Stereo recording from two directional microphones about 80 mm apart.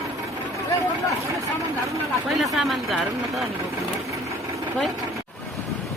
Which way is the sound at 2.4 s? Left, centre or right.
Centre.